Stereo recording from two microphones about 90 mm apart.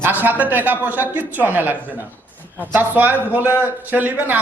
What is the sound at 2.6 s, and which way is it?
A man's voice, 20° right (ahead or behind).